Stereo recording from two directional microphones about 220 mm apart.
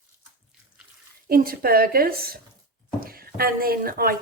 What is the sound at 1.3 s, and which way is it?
A woman's voice, 40° right (ahead or behind).